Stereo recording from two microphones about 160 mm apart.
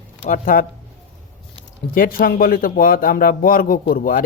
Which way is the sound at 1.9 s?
60° left (ahead or behind).